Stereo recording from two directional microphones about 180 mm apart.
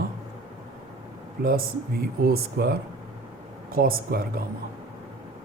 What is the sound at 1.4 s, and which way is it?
Speech, 55° right (ahead or behind).